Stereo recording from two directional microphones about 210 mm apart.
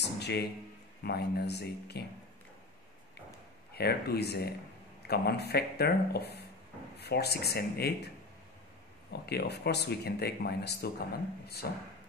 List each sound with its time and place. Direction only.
0.0 s a sound: 50° left (ahead or behind)
1.0 s speech: 50° left (ahead or behind)
3.7 s speech: 50° left (ahead or behind)
9.2 s speech: 50° left (ahead or behind)